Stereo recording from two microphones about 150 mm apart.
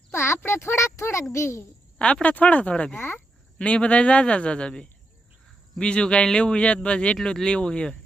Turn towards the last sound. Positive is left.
turn(degrees=5)  # may be behind; listen again after turning